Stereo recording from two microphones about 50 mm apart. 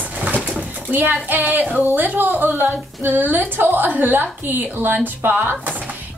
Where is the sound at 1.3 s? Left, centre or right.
Right.